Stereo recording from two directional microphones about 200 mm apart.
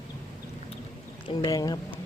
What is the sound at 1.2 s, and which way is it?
Speech, 20° left (ahead or behind).